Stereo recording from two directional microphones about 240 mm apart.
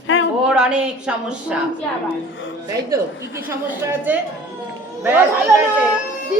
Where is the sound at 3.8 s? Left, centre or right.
Centre.